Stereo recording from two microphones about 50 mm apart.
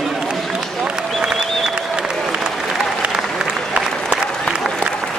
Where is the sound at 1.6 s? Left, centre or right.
Centre.